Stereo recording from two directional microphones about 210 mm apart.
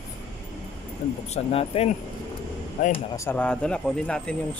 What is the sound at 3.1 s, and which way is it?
Speech, 10° left (ahead or behind).